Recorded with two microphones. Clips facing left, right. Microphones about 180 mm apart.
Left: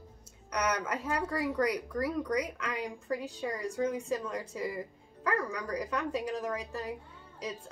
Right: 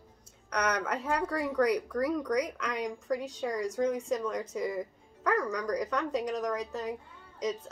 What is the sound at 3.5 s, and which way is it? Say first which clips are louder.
Speech: right 4 dB; 70° right (ahead or behind).